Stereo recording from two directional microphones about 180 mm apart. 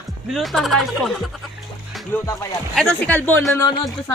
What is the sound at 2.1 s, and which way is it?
Speech, 10° left (ahead or behind).